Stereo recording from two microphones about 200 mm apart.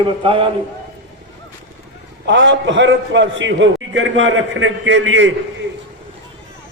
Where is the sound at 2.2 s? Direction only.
65° right (ahead or behind).